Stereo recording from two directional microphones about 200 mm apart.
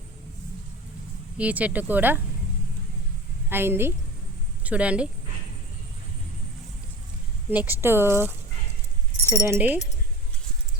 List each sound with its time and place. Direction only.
1.4 s speech: 5° right (ahead or behind)
3.5 s speech: 10° right (ahead or behind)
7.5 s speech: 10° right (ahead or behind)
9.3 s speech: 10° right (ahead or behind)